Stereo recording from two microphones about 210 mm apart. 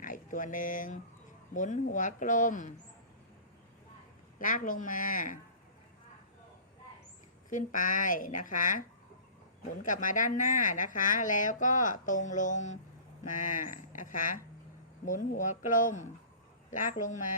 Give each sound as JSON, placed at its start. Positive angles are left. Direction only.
{"t": 0.0, "sound": "a woman's voice", "side_deg": 40}
{"t": 4.4, "sound": "a woman's voice", "side_deg": 40}
{"t": 7.5, "sound": "a woman's voice", "side_deg": 40}
{"t": 9.8, "sound": "a woman's voice", "side_deg": 40}